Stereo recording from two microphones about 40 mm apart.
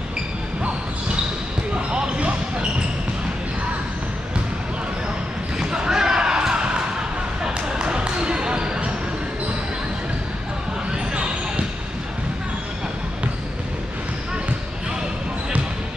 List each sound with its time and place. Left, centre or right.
1.9 s basketball bounce: right
5.6 s basketball bounce: centre
11.1 s basketball bounce: right